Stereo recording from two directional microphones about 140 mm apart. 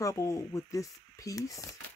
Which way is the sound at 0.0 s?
20° left (ahead or behind).